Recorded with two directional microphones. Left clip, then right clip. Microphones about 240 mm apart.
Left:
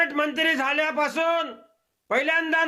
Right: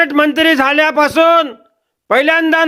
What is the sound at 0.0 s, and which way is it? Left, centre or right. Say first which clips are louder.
A man's voice: right 11 dB; right.